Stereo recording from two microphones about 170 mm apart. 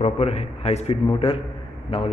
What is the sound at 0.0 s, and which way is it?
A man's voice, 35° left (ahead or behind).